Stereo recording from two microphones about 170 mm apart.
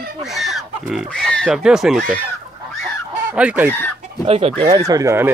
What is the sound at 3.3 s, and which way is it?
Speech, 10° right (ahead or behind).